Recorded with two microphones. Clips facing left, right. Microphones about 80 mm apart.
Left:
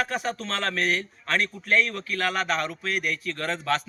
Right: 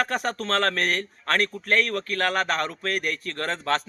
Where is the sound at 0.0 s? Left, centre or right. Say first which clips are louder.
Right 2 dB; right.